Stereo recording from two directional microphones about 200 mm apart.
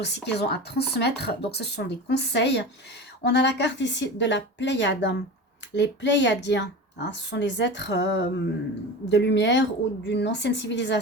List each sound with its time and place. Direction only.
0.0 s speech: 60° left (ahead or behind)